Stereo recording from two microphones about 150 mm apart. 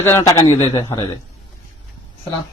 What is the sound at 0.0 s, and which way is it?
A man's voice, 15° left (ahead or behind).